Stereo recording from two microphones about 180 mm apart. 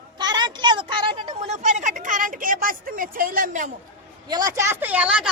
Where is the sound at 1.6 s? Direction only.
45° right (ahead or behind).